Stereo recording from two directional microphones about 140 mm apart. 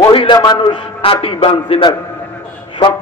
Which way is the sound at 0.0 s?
35° left (ahead or behind).